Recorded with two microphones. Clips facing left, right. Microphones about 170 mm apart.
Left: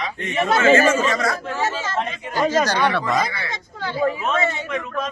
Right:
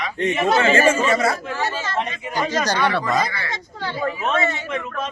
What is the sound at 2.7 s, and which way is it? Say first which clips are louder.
Speech: even; 10° left (ahead or behind).